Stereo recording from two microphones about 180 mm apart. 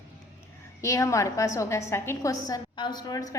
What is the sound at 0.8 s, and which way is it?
A woman's voice, 15° left (ahead or behind).